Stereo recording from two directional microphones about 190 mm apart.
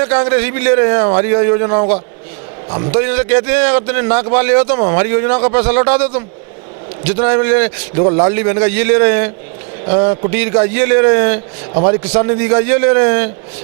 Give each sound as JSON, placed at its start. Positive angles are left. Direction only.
{"t": 0.0, "sound": "a man's voice", "side_deg": -15}
{"t": 2.9, "sound": "a man's voice", "side_deg": -15}
{"t": 9.8, "sound": "a man's voice", "side_deg": -35}
{"t": 10.7, "sound": "a man's voice", "side_deg": -15}